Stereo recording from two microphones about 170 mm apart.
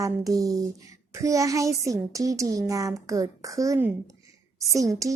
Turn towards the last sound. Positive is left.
turn(degrees=-20)  # may be behind; listen again after turning